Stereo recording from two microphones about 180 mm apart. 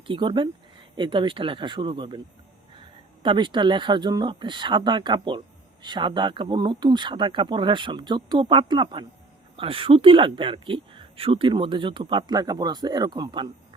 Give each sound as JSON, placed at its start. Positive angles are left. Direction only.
{"t": 0.1, "sound": "speech", "side_deg": -25}
{"t": 3.2, "sound": "speech", "side_deg": -25}